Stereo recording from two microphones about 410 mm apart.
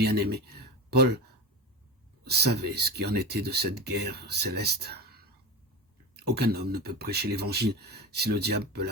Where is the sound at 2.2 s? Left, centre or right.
Right.